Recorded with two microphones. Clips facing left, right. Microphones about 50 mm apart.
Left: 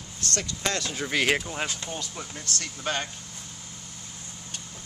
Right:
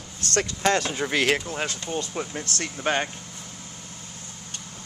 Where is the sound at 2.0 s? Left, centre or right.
Right.